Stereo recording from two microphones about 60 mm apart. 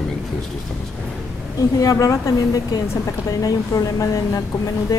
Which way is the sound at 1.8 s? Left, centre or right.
Left.